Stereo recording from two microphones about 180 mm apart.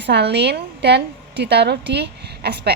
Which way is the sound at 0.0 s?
70° right (ahead or behind).